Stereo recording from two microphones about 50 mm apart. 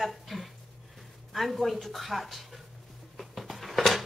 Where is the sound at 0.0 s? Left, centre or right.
Centre.